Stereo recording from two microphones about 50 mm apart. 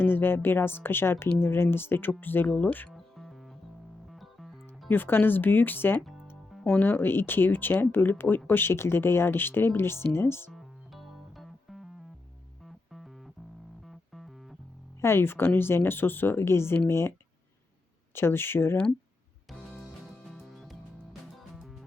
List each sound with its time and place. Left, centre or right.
0.0 s speech: left
2.5 s speech: left
2.9 s music: centre
4.9 s speech: left
10.5 s music: centre
15.0 s speech: left
20.1 s music: centre